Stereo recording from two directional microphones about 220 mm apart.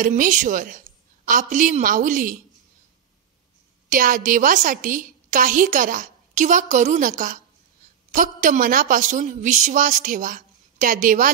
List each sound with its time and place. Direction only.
0.0 s a woman's voice: 35° right (ahead or behind)
3.9 s a woman's voice: 40° right (ahead or behind)